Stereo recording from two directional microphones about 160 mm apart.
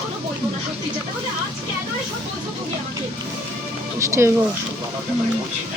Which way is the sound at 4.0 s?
15° right (ahead or behind).